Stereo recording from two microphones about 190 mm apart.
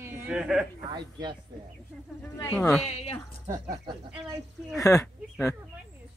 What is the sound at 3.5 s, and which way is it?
Speech, 20° right (ahead or behind).